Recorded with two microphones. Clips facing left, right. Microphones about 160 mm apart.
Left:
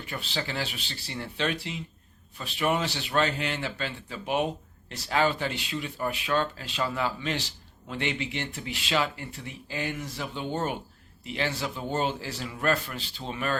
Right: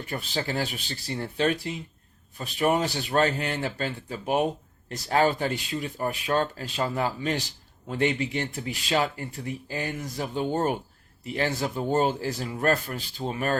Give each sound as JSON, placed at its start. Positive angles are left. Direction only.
{"t": 0.0, "sound": "speech", "side_deg": -45}